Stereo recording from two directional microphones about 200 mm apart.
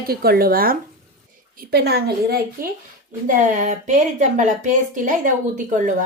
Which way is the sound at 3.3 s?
40° right (ahead or behind).